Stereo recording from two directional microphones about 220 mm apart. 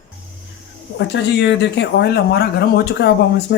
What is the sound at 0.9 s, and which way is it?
Speech, 50° left (ahead or behind).